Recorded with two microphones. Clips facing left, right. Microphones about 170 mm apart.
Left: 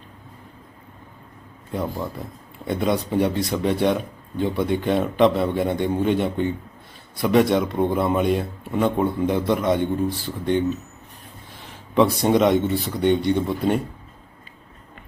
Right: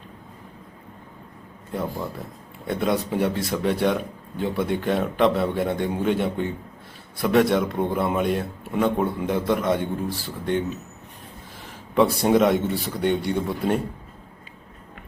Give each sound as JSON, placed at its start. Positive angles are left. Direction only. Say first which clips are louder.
{"t": 1.7, "sound": "a man's voice", "louder": "left 2 dB", "side_deg": 0}
{"t": 11.9, "sound": "a man's voice", "louder": "left 1 dB", "side_deg": -5}